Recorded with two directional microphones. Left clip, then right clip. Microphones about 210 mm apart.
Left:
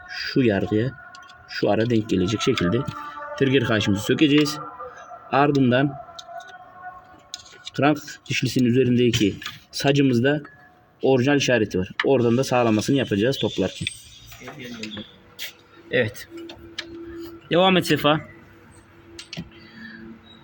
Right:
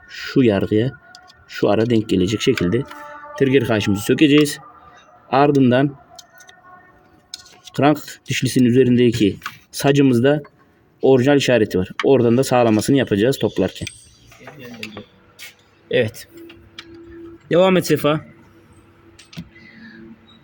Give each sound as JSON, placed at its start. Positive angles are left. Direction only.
{"t": 0.1, "sound": "speech", "side_deg": -30}
{"t": 7.8, "sound": "speech", "side_deg": -30}
{"t": 15.9, "sound": "speech", "side_deg": -45}
{"t": 17.5, "sound": "speech", "side_deg": -40}